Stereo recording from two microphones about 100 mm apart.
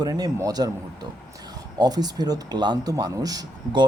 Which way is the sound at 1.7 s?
40° right (ahead or behind).